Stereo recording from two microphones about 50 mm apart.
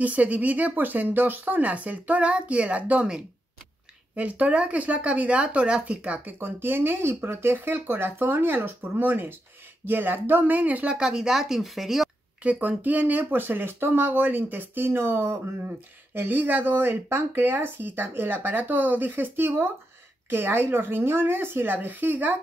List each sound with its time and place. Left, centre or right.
0.0 s speech: right
6.4 s speech: right
7.5 s speech: right
10.9 s speech: centre
12.4 s speech: right
16.2 s speech: right